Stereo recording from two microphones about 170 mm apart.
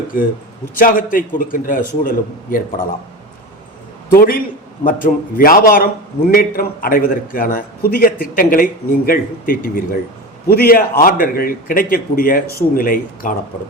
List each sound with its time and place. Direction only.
0.1 s a man's voice: 55° left (ahead or behind)
4.1 s a man's voice: 60° left (ahead or behind)